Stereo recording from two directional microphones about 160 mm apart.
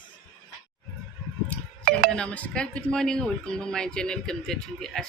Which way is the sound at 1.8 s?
70° right (ahead or behind).